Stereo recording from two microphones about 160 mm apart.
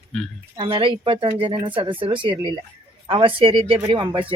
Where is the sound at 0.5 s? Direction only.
30° right (ahead or behind).